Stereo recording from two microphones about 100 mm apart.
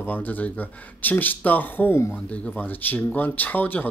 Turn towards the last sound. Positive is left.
turn(degrees=20)  # may be behind; listen again after turning